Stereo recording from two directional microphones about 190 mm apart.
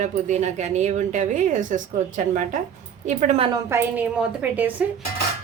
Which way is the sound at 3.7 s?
5° right (ahead or behind).